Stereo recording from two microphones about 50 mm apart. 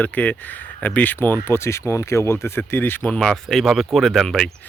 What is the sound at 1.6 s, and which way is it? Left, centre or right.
Speech, left.